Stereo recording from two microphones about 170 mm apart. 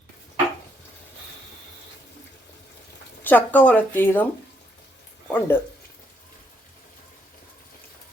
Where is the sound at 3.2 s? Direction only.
10° left (ahead or behind).